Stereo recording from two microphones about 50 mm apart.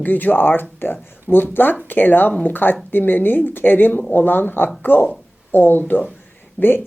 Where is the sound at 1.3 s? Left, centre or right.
Right.